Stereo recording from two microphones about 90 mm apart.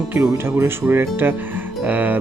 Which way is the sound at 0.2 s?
30° right (ahead or behind).